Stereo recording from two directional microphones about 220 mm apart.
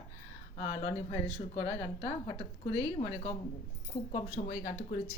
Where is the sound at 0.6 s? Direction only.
30° left (ahead or behind).